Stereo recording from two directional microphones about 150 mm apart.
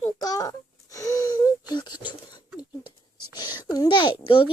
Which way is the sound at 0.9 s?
20° left (ahead or behind).